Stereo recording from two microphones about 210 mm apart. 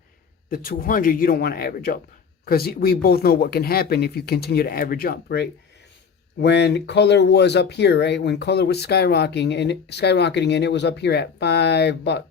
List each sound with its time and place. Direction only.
0.5 s speech: 45° left (ahead or behind)